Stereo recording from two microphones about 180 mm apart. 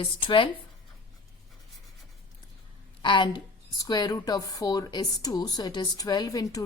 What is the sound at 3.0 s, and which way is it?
Speech, 25° left (ahead or behind).